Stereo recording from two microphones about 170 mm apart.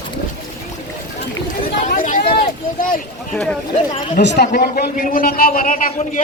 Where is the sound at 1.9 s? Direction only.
55° left (ahead or behind).